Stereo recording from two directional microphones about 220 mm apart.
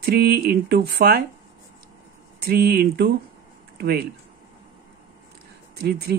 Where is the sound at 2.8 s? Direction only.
45° right (ahead or behind).